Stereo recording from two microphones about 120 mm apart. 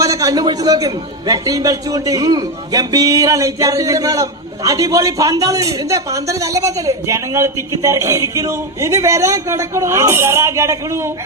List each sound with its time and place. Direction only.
0.0 s a man's voice: 30° right (ahead or behind)